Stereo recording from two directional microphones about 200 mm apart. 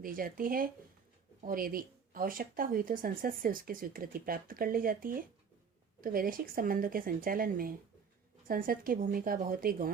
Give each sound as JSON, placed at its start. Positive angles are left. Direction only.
{"t": 0.0, "sound": "speech", "side_deg": -45}